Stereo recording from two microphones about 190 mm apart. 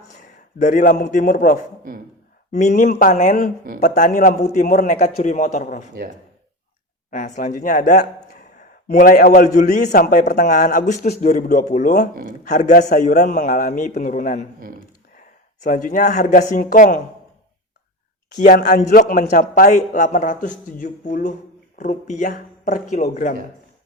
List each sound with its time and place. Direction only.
0.1 s a sound: 40° left (ahead or behind)
1.1 s speech: 40° left (ahead or behind)
2.5 s a man's voice: 40° left (ahead or behind)
7.1 s a man's voice: 40° left (ahead or behind)
15.6 s speech: 40° left (ahead or behind)
18.3 s a man's voice: 45° left (ahead or behind)